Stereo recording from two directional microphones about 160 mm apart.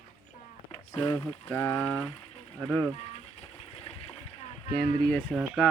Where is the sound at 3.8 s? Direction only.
35° left (ahead or behind).